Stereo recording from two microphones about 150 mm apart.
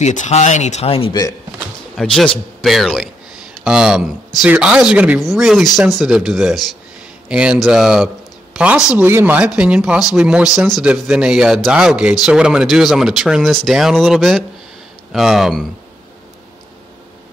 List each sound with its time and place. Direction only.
0.0 s speech: 50° left (ahead or behind)
2.0 s a man's voice: centre (ahead or behind)